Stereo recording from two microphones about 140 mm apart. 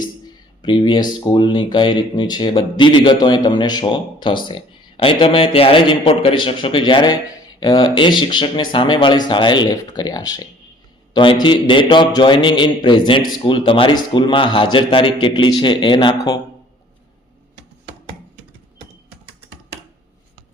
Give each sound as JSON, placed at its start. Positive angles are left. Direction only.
{"t": 0.6, "sound": "speech", "side_deg": 35}